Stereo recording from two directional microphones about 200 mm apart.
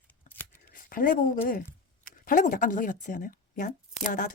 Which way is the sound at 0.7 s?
45° left (ahead or behind).